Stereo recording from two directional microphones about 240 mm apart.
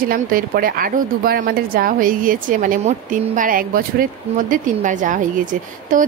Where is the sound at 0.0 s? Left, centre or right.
Right.